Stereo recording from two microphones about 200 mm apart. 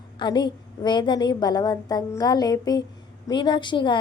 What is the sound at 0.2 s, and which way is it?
A woman's voice, 20° left (ahead or behind).